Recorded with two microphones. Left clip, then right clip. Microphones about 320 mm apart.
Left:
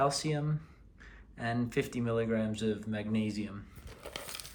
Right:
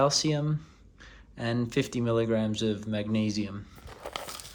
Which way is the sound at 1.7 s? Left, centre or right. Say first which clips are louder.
Right 7 dB; centre.